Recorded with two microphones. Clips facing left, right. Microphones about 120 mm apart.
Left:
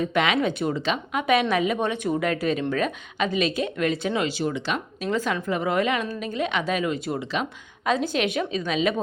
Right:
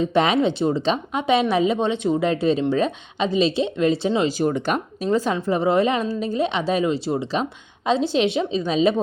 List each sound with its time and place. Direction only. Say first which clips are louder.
0.0 s speech: right 4 dB; 35° right (ahead or behind)
4.4 s speech: right 5 dB; 45° right (ahead or behind)
5.1 s speech: right 5 dB; 35° right (ahead or behind)